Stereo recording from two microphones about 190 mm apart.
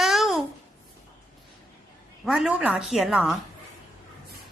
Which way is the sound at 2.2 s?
5° right (ahead or behind).